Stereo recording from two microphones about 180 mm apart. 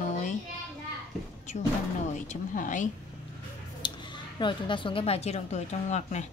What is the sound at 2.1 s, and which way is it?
Speech, 45° left (ahead or behind).